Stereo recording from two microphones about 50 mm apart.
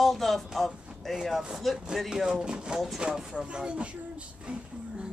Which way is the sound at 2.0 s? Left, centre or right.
Centre.